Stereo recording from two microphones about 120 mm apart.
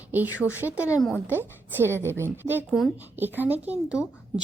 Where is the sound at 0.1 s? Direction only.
15° right (ahead or behind).